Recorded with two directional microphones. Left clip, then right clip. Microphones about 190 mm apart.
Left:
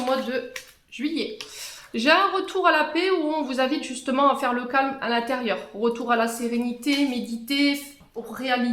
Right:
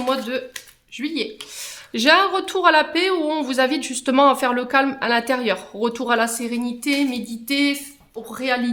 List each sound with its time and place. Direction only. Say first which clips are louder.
0.1 s speech: right 3 dB; 30° right (ahead or behind)
0.9 s a sound: right 2 dB; 25° right (ahead or behind)
1.9 s speech: right 4 dB; 35° right (ahead or behind)